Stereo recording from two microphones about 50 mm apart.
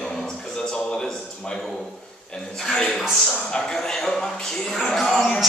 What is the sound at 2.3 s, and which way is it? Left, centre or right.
A man's voice, centre.